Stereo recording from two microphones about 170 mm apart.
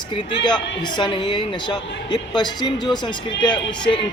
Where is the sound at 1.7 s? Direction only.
25° left (ahead or behind).